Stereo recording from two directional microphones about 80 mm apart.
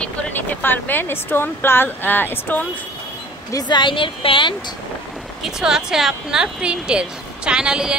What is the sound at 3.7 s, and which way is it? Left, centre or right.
Speech, left.